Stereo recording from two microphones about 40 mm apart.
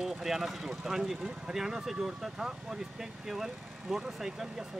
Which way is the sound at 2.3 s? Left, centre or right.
Centre.